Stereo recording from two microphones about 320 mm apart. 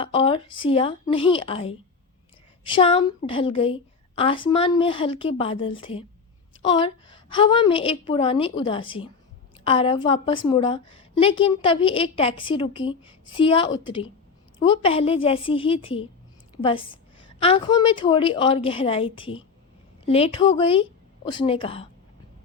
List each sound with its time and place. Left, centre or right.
0.0 s a woman's voice: centre